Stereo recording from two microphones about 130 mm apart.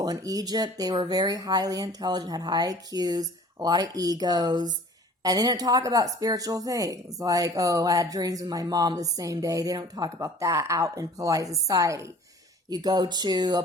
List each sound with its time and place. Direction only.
0.0 s speech: 30° right (ahead or behind)